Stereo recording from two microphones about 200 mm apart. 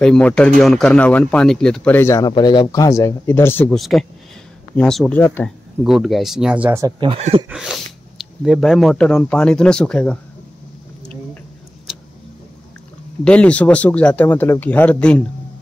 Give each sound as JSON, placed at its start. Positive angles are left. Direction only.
{"t": 0.0, "sound": "speech", "side_deg": 5}
{"t": 5.9, "sound": "speech", "side_deg": 0}
{"t": 7.0, "sound": "speech", "side_deg": -30}
{"t": 7.4, "sound": "speech", "side_deg": -5}
{"t": 13.2, "sound": "speech", "side_deg": 5}